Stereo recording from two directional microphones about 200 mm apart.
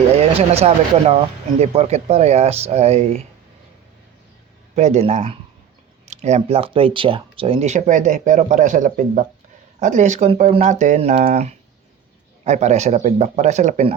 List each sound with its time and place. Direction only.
0.2 s speech: 30° right (ahead or behind)
4.7 s speech: 35° right (ahead or behind)